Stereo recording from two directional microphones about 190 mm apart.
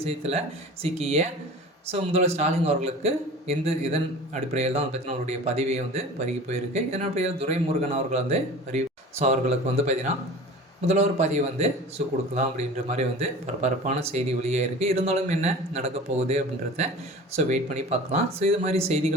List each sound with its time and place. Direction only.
0.0 s speech: 35° right (ahead or behind)